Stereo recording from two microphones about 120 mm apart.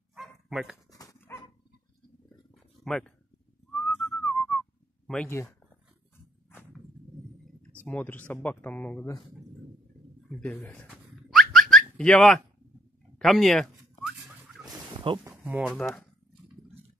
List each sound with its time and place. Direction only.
0.1 s dog: 5° right (ahead or behind)
1.3 s dog: 20° left (ahead or behind)
2.5 s a sound: 5° left (ahead or behind)
3.8 s whistling: 5° left (ahead or behind)
5.3 s speech: 25° left (ahead or behind)
7.8 s speech: 15° left (ahead or behind)
10.6 s speech: 10° left (ahead or behind)
10.9 s a sound: centre (ahead or behind)
15.2 s a sound: 20° right (ahead or behind)
15.7 s speech: 10° left (ahead or behind)